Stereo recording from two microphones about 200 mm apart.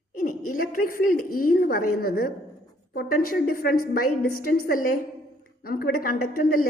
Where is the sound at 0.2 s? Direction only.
45° left (ahead or behind).